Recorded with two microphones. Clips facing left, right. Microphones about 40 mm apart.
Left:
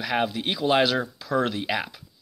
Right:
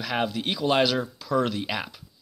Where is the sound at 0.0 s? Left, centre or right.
Centre.